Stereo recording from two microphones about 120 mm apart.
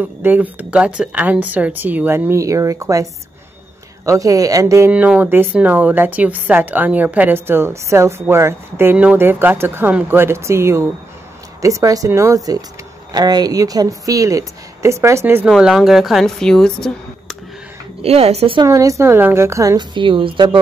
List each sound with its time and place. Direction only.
0.0 s speech: 15° right (ahead or behind)
4.9 s speech: 10° right (ahead or behind)
15.4 s a woman's voice: 5° right (ahead or behind)
18.0 s speech: 60° right (ahead or behind)
18.6 s speech: 30° right (ahead or behind)
19.8 s speech: 40° right (ahead or behind)